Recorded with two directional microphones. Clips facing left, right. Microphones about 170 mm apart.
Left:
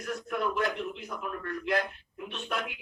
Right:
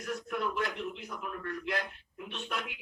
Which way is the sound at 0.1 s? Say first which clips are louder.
Left 3 dB; 55° left (ahead or behind).